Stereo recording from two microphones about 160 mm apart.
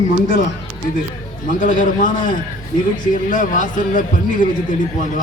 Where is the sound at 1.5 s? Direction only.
55° left (ahead or behind).